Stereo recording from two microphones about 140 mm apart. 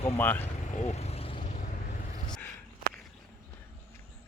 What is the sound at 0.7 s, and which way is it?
Vehicle, 55° left (ahead or behind).